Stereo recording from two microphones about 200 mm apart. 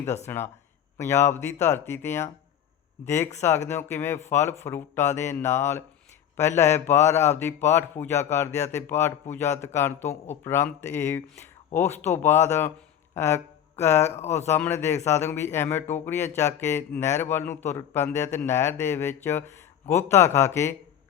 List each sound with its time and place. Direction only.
0.3 s a man's voice: 10° left (ahead or behind)
3.7 s speech: 10° left (ahead or behind)